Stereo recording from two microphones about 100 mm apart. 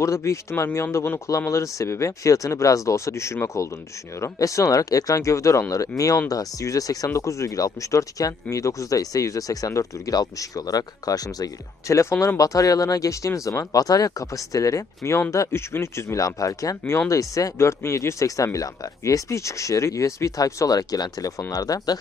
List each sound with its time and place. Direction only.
0.0 s speech: 30° left (ahead or behind)